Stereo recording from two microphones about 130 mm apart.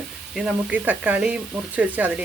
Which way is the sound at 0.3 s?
10° right (ahead or behind).